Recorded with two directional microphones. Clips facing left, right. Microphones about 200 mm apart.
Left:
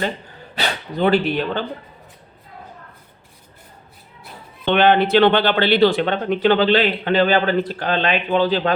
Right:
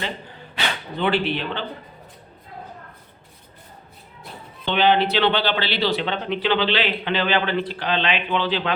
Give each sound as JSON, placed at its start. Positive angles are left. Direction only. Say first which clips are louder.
{"t": 0.5, "sound": "speech", "louder": "left 3 dB", "side_deg": 40}
{"t": 4.6, "sound": "speech", "louder": "left 4 dB", "side_deg": 55}